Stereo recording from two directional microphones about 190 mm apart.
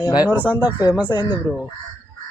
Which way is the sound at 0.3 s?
10° right (ahead or behind).